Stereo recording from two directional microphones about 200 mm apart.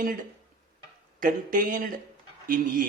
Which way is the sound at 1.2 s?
45° right (ahead or behind).